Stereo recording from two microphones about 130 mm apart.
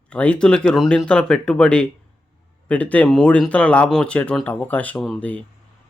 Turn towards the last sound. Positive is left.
turn(degrees=5)  # may be behind; listen again after turning